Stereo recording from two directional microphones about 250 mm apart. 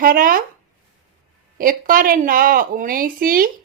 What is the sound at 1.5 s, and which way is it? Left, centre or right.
Speech, right.